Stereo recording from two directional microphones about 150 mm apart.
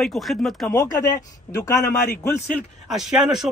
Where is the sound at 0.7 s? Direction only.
20° left (ahead or behind).